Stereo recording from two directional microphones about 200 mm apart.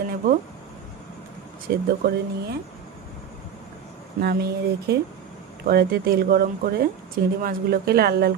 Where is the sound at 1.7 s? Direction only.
50° right (ahead or behind).